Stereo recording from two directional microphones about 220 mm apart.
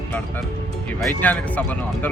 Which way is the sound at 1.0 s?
5° left (ahead or behind).